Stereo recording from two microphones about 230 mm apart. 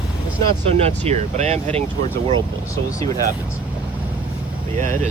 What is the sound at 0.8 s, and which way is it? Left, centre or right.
Speech, right.